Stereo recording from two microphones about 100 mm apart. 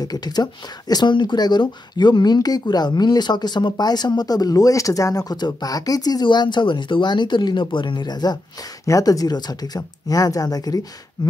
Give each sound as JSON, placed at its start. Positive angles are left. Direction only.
{"t": 0.0, "sound": "speech", "side_deg": 40}